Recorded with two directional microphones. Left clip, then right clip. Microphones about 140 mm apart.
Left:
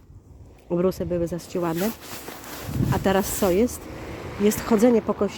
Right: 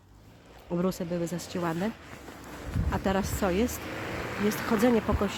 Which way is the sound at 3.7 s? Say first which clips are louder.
Right 1 dB; 25° left (ahead or behind).